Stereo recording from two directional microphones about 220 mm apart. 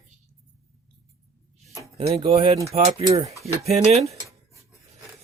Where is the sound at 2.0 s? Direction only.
25° right (ahead or behind).